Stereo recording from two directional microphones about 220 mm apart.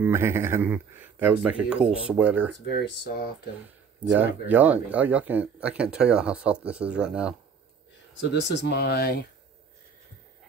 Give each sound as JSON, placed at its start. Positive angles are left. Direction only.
{"t": 0.0, "sound": "speech", "side_deg": -10}
{"t": 2.6, "sound": "speech", "side_deg": 45}
{"t": 4.5, "sound": "speech", "side_deg": -10}
{"t": 8.2, "sound": "speech", "side_deg": 55}